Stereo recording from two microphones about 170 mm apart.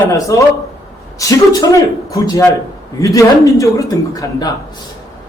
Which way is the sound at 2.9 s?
20° left (ahead or behind).